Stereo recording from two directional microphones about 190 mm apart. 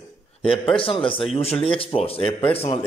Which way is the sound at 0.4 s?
30° left (ahead or behind).